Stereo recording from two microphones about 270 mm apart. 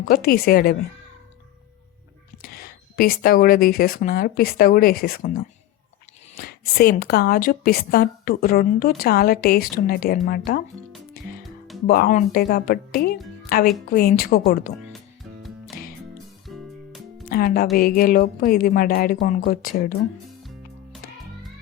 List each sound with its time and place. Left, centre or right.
0.0 s a woman's voice: left
2.4 s a woman's voice: left
11.9 s a woman's voice: left
14.9 s music: centre
17.2 s a woman's voice: left